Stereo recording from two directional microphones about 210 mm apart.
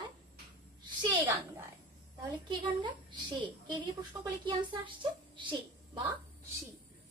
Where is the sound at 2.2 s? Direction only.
20° right (ahead or behind).